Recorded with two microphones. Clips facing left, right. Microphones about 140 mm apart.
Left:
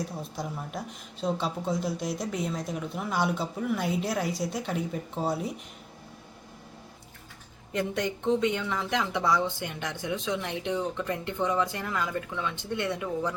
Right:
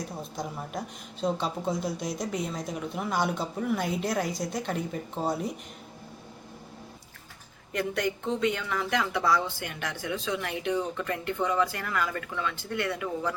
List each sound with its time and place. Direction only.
0.2 s speech: centre (ahead or behind)
7.7 s a woman's voice: 20° left (ahead or behind)